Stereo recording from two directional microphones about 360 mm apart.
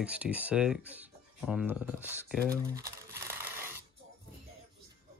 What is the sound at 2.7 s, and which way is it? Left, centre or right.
Crumpling, centre.